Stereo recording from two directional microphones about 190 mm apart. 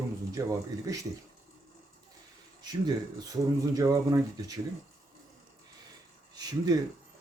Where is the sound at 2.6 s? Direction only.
20° right (ahead or behind).